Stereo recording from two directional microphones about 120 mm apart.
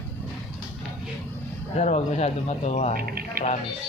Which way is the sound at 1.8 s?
75° left (ahead or behind).